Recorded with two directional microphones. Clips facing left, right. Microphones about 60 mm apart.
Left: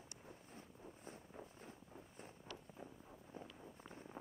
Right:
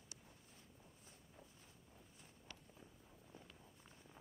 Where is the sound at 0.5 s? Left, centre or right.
Left.